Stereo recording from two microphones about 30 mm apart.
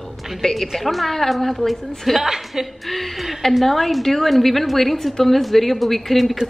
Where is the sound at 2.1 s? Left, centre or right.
Centre.